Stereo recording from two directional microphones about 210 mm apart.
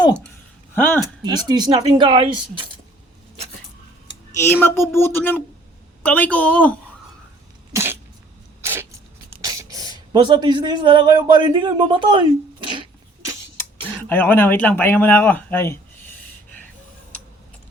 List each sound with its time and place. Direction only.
1.0 s speech: 20° right (ahead or behind)
4.6 s a woman's voice: 10° left (ahead or behind)
7.7 s cough: 10° right (ahead or behind)
8.6 s a sound: 10° right (ahead or behind)
9.4 s speech: 15° right (ahead or behind)
14.0 s speech: 10° left (ahead or behind)